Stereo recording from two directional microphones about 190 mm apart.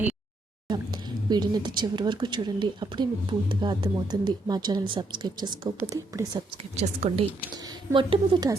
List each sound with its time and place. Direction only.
0.7 s a woman's voice: 20° right (ahead or behind)
6.3 s speech: 30° right (ahead or behind)
7.5 s a woman's voice: 20° right (ahead or behind)